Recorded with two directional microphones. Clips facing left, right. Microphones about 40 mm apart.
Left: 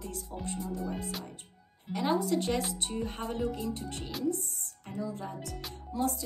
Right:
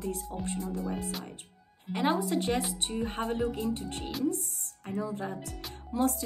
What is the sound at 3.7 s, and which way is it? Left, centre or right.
Speech, right.